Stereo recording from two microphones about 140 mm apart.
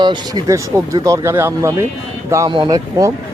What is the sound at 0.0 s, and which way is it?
Speech, 30° right (ahead or behind).